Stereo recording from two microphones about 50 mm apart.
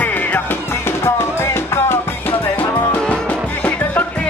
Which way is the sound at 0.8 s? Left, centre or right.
Left.